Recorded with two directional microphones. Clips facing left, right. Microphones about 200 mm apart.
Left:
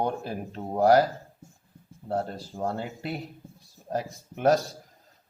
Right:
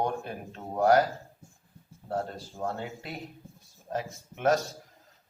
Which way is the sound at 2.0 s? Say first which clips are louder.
Left 3 dB; 35° left (ahead or behind).